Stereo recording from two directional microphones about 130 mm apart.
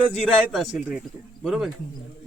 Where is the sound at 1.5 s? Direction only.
Centre (ahead or behind).